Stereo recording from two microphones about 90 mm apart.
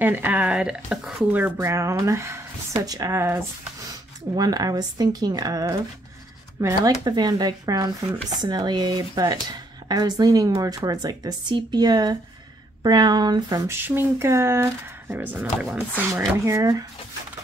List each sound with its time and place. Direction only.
0.0 s speech: 20° right (ahead or behind)
1.6 s speech: 35° right (ahead or behind)
4.4 s speech: 45° right (ahead or behind)
6.8 s speech: 50° right (ahead or behind)
13.7 s speech: 25° right (ahead or behind)
16.1 s speech: 35° right (ahead or behind)